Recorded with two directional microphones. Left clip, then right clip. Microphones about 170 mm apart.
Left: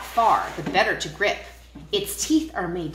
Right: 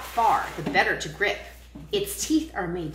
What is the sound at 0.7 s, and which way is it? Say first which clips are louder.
A woman's voice: left 2 dB; 35° left (ahead or behind).